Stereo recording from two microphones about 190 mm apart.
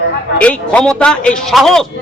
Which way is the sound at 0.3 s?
5° left (ahead or behind).